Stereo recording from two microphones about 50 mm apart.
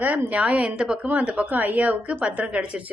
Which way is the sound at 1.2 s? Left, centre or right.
Right.